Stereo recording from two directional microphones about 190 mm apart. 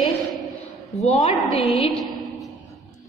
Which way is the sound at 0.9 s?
35° left (ahead or behind).